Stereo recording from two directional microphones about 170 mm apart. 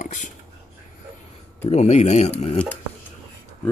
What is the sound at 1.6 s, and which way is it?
Speech, 40° left (ahead or behind).